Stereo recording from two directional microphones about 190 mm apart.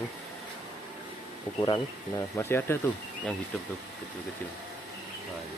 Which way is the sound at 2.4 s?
10° left (ahead or behind).